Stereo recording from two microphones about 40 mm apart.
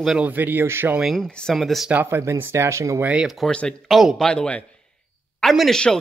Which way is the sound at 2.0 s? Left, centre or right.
Right.